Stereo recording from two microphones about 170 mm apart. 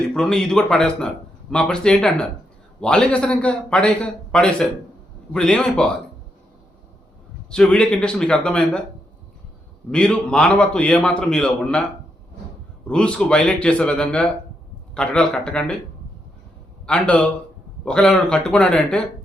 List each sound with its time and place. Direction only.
0.1 s a man's voice: 5° left (ahead or behind)
7.5 s a man's voice: 5° left (ahead or behind)
9.9 s a man's voice: 5° left (ahead or behind)
12.9 s a man's voice: 5° left (ahead or behind)
16.8 s a man's voice: 5° left (ahead or behind)